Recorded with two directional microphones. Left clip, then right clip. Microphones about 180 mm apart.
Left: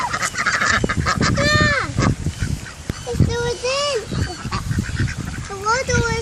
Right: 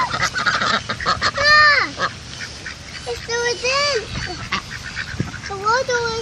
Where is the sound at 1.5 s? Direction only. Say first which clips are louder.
Right 8 dB; 10° right (ahead or behind).